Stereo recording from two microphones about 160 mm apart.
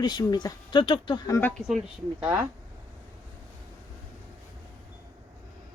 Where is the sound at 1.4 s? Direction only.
10° left (ahead or behind).